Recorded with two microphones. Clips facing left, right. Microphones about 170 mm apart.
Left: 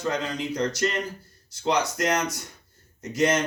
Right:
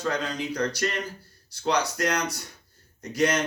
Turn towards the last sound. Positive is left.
turn(degrees=25)  # may be behind; listen again after turning